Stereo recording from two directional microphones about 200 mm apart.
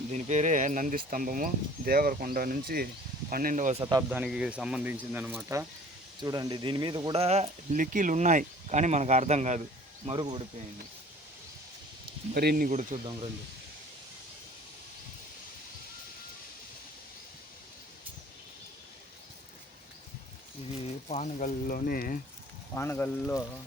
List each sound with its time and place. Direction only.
0.1 s speech: 35° right (ahead or behind)
4.1 s speech: 5° right (ahead or behind); by 9.6 s 35° right (ahead or behind)
10.1 s speech: 25° right (ahead or behind)
12.3 s speech: 50° right (ahead or behind)
21.1 s speech: 35° left (ahead or behind)
22.7 s speech: 10° left (ahead or behind)